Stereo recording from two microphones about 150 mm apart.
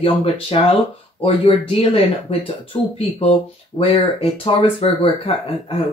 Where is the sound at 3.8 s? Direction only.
40° left (ahead or behind).